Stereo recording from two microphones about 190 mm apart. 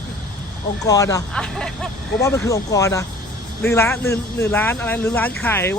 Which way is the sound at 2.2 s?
15° left (ahead or behind).